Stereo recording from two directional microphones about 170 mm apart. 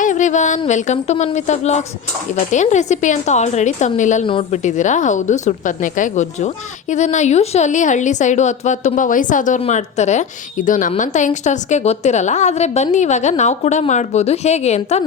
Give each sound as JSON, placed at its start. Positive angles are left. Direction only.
{"t": 0.0, "sound": "speech", "side_deg": 45}
{"t": 4.3, "sound": "a woman's voice", "side_deg": 30}
{"t": 4.6, "sound": "speech", "side_deg": 45}